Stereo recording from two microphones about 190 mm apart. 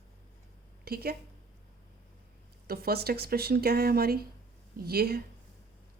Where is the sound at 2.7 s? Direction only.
55° right (ahead or behind).